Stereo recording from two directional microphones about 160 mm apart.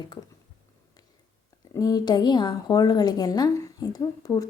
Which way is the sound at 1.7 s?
25° left (ahead or behind).